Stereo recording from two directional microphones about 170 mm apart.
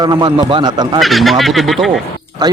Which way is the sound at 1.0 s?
Centre (ahead or behind).